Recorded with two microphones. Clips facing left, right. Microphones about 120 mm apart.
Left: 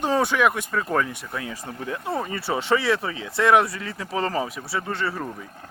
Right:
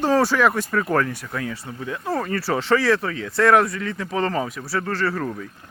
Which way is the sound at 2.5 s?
15° left (ahead or behind).